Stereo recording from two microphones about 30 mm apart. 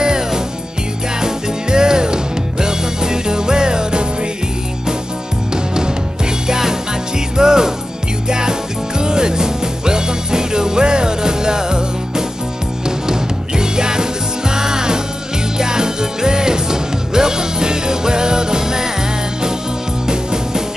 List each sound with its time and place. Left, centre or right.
0.0 s music: right
6.4 s music: centre